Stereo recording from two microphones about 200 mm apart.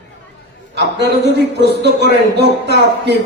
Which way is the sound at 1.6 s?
55° right (ahead or behind).